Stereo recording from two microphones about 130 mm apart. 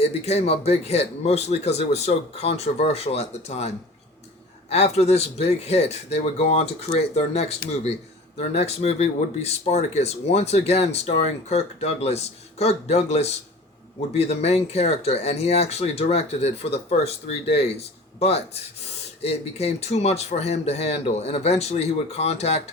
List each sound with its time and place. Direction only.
0.0 s speech: 55° left (ahead or behind)